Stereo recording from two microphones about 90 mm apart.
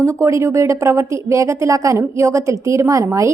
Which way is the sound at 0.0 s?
30° right (ahead or behind).